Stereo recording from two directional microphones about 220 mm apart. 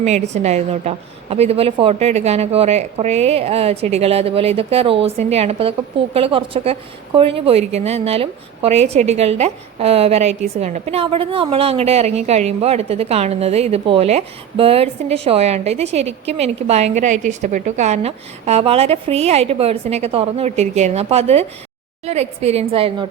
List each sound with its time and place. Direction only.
0.0 s a woman's voice: 30° right (ahead or behind)